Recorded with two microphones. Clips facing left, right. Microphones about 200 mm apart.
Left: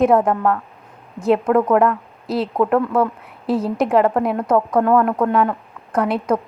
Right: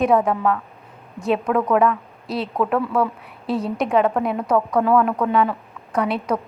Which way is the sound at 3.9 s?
Centre (ahead or behind).